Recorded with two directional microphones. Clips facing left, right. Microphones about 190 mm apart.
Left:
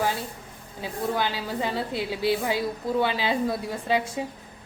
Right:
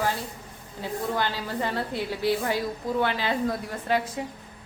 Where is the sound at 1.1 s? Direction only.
10° left (ahead or behind).